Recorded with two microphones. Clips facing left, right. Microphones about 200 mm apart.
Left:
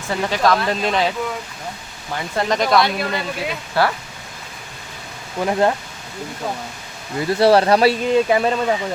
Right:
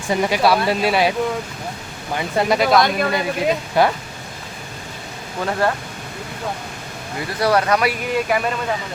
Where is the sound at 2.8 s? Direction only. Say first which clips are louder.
Right 3 dB; 50° right (ahead or behind).